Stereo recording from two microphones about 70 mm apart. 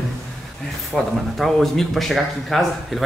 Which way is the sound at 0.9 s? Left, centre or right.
Centre.